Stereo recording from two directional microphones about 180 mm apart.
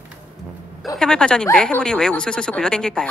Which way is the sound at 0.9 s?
5° left (ahead or behind).